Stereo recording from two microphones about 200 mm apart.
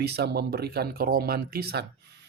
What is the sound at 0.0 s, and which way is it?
Speech, 55° right (ahead or behind).